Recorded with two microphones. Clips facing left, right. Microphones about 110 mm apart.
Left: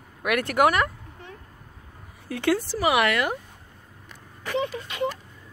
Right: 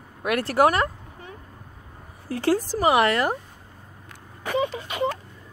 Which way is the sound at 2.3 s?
35° right (ahead or behind).